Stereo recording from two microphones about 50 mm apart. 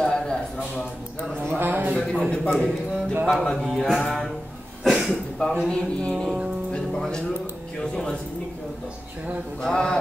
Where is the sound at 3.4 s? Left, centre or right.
Centre.